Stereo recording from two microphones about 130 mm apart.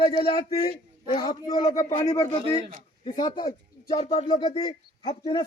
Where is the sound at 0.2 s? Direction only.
45° left (ahead or behind).